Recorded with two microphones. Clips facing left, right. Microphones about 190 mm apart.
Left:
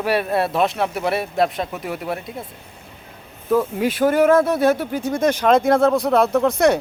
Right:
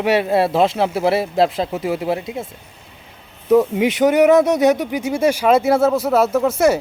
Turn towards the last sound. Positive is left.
turn(degrees=-5)  # may be behind; listen again after turning